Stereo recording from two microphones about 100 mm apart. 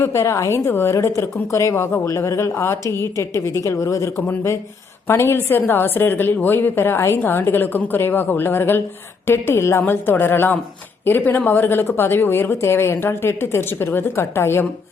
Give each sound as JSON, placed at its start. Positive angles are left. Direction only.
{"t": 0.0, "sound": "a woman's voice", "side_deg": 25}